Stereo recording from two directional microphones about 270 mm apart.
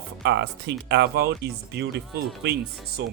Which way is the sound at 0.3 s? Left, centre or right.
Right.